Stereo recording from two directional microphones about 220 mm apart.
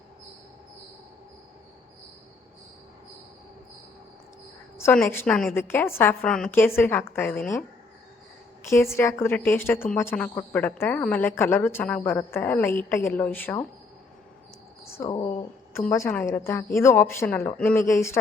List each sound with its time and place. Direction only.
4.8 s a woman's voice: 10° left (ahead or behind)
8.7 s a woman's voice: 10° left (ahead or behind)
14.8 s a woman's voice: 15° left (ahead or behind)